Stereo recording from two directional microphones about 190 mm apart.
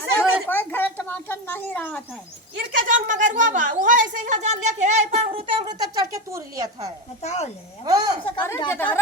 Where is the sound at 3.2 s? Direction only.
40° right (ahead or behind).